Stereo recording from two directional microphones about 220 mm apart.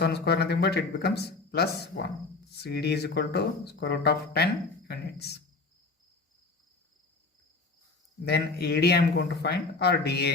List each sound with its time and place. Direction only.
0.0 s speech: 50° left (ahead or behind)
8.2 s speech: 45° left (ahead or behind)